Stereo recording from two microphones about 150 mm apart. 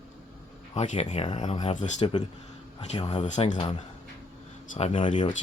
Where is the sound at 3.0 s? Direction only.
50° left (ahead or behind).